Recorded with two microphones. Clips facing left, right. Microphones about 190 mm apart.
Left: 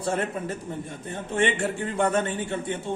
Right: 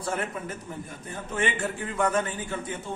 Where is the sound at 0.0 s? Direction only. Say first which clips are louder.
Left 4 dB; 30° left (ahead or behind).